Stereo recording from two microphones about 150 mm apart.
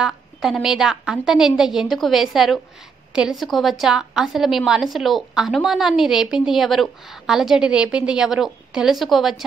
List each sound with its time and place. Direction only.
0.0 s a woman's voice: 5° right (ahead or behind)